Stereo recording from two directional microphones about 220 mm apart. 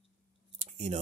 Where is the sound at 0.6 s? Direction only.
30° right (ahead or behind).